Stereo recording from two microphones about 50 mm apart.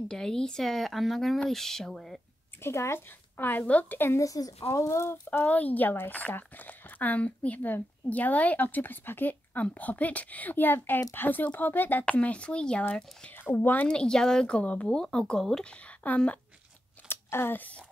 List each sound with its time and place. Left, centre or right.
0.1 s speech: centre
2.6 s speech: left
3.3 s a woman's voice: left
4.6 s speech: left
5.4 s speech: left
12.1 s speech: left
13.4 s speech: left
13.8 s speech: centre
14.6 s speech: left
15.0 s speech: centre
15.6 s speech: left
17.1 s a sound: left
17.6 s speech: left